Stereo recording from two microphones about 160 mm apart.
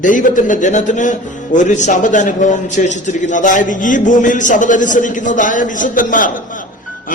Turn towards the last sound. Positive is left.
turn(degrees=55)  # may be behind; listen again after turning